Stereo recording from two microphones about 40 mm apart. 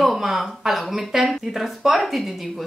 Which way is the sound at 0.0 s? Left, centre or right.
Centre.